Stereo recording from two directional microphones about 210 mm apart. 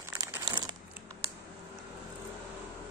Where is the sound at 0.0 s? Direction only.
15° right (ahead or behind).